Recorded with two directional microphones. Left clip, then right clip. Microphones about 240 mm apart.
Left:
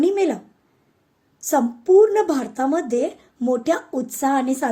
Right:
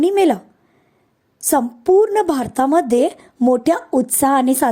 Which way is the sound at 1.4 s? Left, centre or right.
Right.